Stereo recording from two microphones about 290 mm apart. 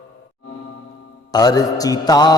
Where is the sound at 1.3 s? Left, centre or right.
Centre.